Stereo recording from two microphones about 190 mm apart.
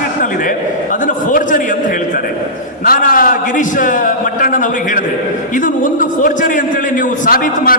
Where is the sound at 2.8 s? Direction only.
45° left (ahead or behind).